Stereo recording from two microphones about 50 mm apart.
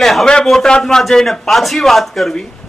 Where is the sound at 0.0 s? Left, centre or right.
Centre.